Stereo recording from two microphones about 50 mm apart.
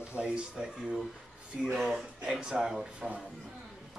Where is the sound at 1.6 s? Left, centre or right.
Centre.